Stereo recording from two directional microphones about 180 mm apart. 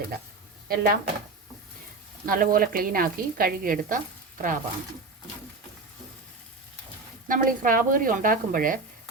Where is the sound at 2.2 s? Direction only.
50° right (ahead or behind).